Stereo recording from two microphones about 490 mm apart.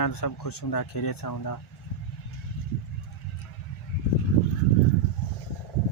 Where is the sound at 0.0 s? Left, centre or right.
Left.